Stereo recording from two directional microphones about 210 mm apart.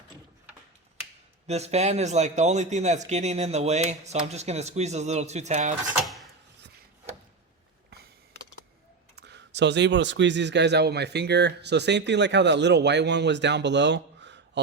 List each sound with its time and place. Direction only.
1.5 s speech: 30° right (ahead or behind)
5.9 s drawer open or close: centre (ahead or behind)
9.2 s speech: 55° right (ahead or behind)